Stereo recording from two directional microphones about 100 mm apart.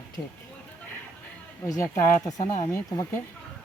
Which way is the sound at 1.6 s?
30° left (ahead or behind).